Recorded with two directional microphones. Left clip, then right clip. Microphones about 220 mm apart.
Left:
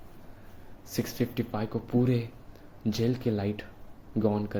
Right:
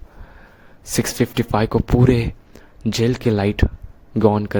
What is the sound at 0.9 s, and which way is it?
Speech, 45° right (ahead or behind).